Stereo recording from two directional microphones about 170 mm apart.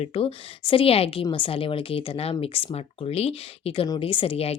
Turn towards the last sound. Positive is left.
turn(degrees=35)  # may be behind; listen again after turning